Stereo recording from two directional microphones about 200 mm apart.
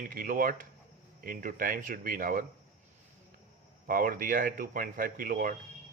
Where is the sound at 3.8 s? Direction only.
45° right (ahead or behind).